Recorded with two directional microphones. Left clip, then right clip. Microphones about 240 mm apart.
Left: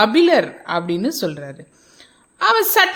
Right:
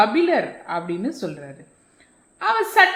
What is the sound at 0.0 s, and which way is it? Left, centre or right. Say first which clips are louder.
A woman's voice: left 4 dB; left.